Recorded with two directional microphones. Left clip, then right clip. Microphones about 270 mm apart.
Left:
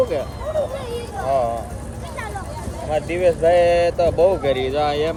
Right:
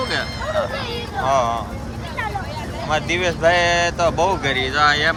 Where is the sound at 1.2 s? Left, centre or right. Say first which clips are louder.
Right 2 dB; right.